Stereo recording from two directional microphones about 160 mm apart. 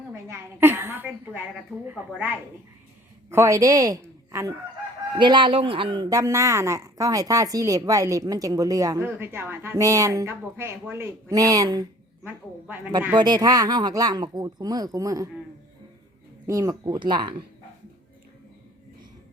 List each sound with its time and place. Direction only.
0.1 s a sound: 15° right (ahead or behind)
3.2 s speech: 20° right (ahead or behind)
5.1 s speech: 30° right (ahead or behind)
12.2 s a woman's voice: 10° right (ahead or behind)
13.1 s speech: 25° right (ahead or behind)
16.5 s speech: 20° right (ahead or behind)